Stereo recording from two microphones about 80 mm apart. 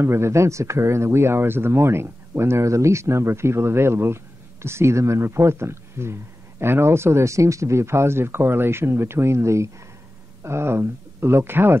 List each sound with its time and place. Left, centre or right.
0.0 s speech: right